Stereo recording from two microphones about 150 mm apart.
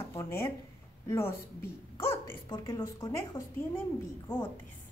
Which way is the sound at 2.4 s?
25° left (ahead or behind).